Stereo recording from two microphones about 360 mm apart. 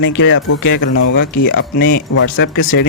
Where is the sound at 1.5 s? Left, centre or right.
Left.